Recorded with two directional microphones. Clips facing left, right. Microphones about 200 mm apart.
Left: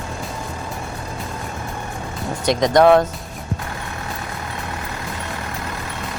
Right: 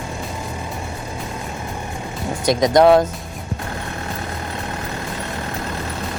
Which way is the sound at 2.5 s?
15° right (ahead or behind).